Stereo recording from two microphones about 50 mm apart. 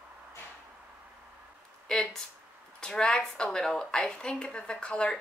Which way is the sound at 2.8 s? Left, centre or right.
Centre.